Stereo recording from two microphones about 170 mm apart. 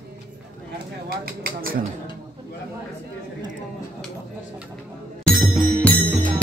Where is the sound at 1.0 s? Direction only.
60° right (ahead or behind).